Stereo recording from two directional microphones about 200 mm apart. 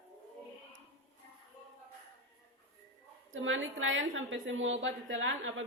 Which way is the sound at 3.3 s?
75° right (ahead or behind).